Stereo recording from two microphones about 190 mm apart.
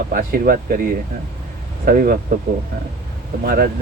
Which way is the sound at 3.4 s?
50° right (ahead or behind).